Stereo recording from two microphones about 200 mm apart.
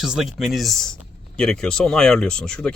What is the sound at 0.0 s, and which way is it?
Speech, centre (ahead or behind).